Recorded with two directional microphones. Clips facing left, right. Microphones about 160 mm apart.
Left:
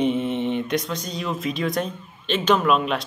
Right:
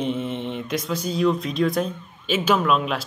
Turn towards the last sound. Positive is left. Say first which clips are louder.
# left 1 dB
turn(degrees=0)  # may be behind; listen again after turning